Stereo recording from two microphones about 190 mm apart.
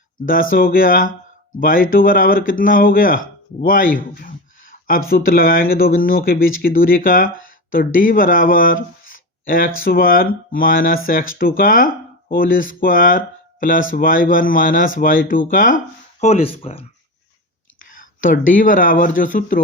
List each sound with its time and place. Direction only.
0.3 s speech: 45° left (ahead or behind)
16.2 s speech: 30° left (ahead or behind)
18.0 s speech: 45° left (ahead or behind)